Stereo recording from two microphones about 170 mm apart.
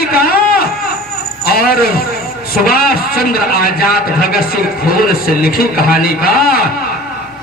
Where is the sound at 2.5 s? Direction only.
60° left (ahead or behind).